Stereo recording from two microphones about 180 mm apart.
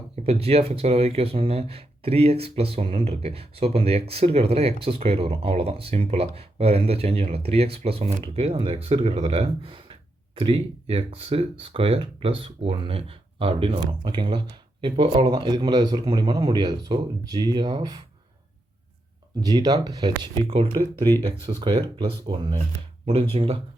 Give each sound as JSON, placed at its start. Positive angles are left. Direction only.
{"t": 0.3, "sound": "speech", "side_deg": -35}
{"t": 19.4, "sound": "speech", "side_deg": -20}
{"t": 20.9, "sound": "speech", "side_deg": 10}
{"t": 21.2, "sound": "speech", "side_deg": -25}